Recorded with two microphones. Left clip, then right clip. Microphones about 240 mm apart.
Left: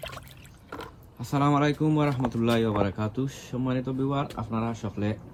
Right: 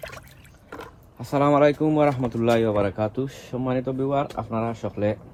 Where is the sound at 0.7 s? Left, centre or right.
Centre.